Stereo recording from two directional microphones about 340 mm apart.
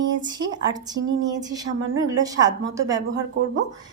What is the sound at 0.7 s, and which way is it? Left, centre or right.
Speech, centre.